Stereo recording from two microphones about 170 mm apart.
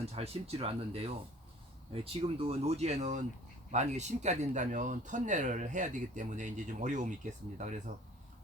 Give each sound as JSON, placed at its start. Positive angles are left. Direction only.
{"t": 0.0, "sound": "speech", "side_deg": -35}